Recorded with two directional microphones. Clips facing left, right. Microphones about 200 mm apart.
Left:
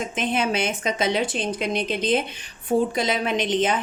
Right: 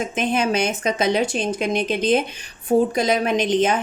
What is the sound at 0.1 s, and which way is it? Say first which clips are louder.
A woman's voice: right 2 dB; 45° right (ahead or behind).